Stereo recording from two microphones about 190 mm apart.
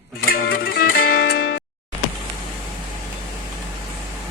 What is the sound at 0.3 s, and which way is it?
Music, 50° left (ahead or behind).